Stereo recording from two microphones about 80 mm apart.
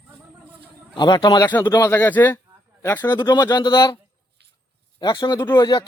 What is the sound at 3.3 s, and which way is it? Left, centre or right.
Speech, left.